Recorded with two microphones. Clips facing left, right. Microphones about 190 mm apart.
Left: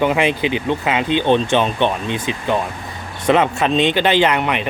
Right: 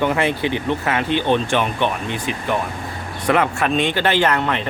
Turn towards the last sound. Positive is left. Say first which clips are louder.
# left 2 dB
turn(degrees=15)  # may be behind; listen again after turning